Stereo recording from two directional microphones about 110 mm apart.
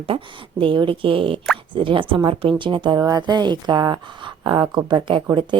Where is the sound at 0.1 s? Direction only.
50° right (ahead or behind).